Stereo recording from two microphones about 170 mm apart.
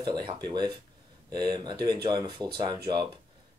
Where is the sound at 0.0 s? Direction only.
30° right (ahead or behind).